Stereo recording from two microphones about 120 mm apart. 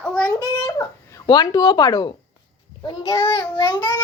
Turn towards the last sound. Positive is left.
turn(degrees=40)  # may be behind; listen again after turning